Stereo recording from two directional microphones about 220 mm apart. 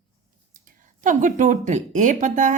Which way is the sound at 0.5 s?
35° right (ahead or behind).